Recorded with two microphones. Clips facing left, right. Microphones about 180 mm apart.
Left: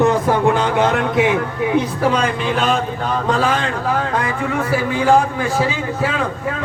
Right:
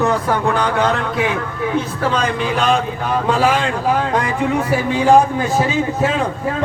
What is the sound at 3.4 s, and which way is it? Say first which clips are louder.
Speech: right 2 dB; 10° right (ahead or behind).